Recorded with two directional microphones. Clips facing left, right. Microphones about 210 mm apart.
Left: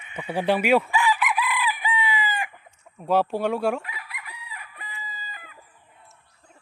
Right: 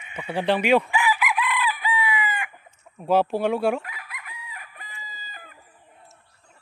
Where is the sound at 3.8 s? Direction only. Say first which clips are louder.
Left 1 dB; 45° right (ahead or behind).